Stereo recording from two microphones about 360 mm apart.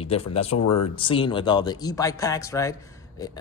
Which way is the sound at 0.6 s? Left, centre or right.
Left.